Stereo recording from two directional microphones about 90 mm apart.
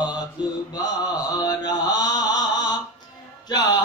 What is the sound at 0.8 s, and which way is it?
Mantra, 45° left (ahead or behind).